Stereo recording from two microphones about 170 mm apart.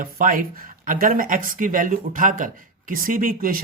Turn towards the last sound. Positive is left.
turn(degrees=-60)  # may be behind; listen again after turning